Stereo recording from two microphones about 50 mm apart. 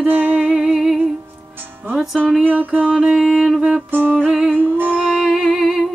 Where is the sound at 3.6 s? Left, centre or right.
Centre.